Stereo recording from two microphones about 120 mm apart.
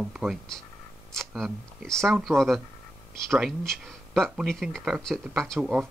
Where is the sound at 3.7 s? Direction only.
5° left (ahead or behind).